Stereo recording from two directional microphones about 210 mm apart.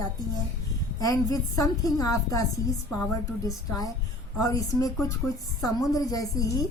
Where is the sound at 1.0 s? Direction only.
15° left (ahead or behind).